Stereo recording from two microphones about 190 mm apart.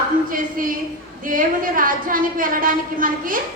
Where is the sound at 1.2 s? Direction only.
45° right (ahead or behind).